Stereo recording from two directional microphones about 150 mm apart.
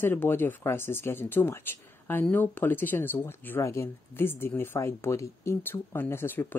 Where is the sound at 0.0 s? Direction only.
15° left (ahead or behind).